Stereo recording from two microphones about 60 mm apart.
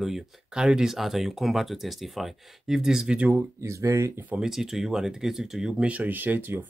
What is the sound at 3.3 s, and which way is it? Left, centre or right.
Speech, right.